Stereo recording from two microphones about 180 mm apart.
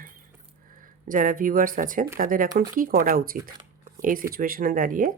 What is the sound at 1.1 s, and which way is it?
Speech, 50° right (ahead or behind).